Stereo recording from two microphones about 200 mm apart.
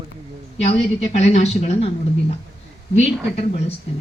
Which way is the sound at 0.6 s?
35° left (ahead or behind).